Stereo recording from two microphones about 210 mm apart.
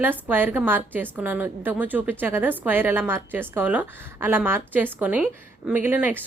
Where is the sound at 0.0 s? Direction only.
10° right (ahead or behind).